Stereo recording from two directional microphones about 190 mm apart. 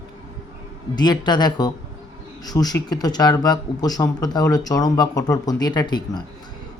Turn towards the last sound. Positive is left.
turn(degrees=20)  # may be behind; listen again after turning